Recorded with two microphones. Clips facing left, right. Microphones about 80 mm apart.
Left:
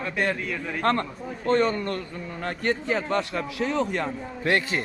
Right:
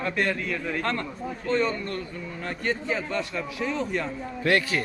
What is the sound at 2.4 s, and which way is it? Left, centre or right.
A man's voice, left.